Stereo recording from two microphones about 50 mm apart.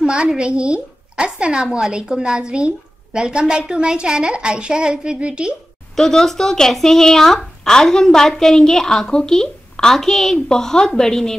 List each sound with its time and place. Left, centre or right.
0.0 s a woman's voice: centre
5.9 s speech: centre